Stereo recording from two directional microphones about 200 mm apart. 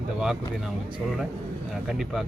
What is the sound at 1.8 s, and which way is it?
Speech, centre (ahead or behind).